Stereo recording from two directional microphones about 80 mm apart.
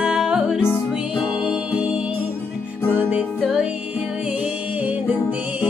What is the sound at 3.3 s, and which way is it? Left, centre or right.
Music, centre.